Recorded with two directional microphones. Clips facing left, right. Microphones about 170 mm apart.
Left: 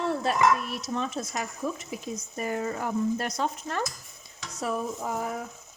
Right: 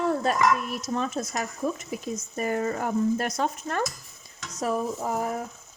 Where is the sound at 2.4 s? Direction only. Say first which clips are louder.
Right 3 dB; 55° right (ahead or behind).